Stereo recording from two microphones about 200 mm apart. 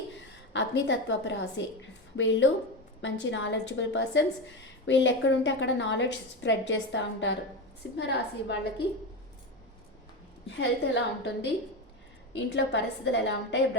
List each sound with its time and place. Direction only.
0.5 s a woman's voice: 65° left (ahead or behind)
10.5 s a woman's voice: 60° left (ahead or behind)